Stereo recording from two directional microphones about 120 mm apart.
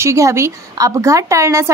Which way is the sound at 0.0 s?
25° right (ahead or behind).